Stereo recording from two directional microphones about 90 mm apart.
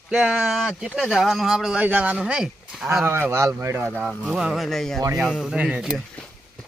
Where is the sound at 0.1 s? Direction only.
10° right (ahead or behind).